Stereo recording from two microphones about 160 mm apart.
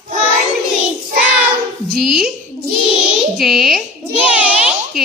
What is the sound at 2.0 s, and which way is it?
Speech, centre (ahead or behind).